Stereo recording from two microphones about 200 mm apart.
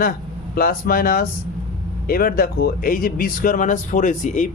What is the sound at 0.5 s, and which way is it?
Speech, 50° left (ahead or behind).